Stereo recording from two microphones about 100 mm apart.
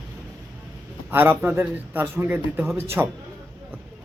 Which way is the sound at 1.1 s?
20° right (ahead or behind).